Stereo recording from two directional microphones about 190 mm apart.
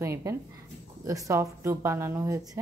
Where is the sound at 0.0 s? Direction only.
15° right (ahead or behind).